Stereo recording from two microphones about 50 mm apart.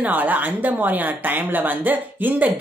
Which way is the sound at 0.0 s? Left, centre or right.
Right.